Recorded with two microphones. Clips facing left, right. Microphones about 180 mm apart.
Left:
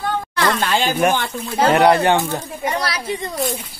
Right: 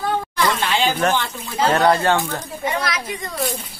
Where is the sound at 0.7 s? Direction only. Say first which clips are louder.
Left 3 dB; 45° left (ahead or behind).